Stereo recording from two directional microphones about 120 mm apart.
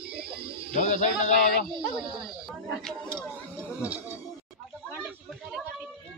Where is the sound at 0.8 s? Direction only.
90° left.